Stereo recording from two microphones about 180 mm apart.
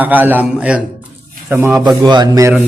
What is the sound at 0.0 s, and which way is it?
Speech, 10° right (ahead or behind).